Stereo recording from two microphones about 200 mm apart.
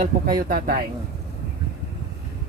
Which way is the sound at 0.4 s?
45° right (ahead or behind).